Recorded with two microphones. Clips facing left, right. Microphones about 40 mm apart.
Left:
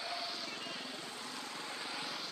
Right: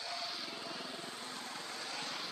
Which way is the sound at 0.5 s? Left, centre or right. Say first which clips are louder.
Even; left.